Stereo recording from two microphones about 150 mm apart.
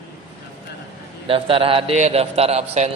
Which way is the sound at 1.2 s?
35° right (ahead or behind).